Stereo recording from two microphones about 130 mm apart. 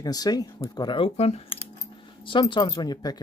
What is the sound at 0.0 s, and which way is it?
Speech, 30° left (ahead or behind).